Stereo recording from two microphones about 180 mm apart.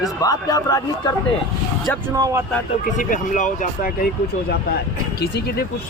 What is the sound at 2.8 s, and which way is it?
A man's voice, 45° left (ahead or behind).